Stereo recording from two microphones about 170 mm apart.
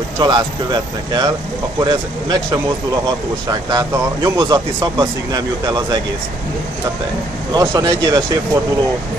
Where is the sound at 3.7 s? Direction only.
20° right (ahead or behind).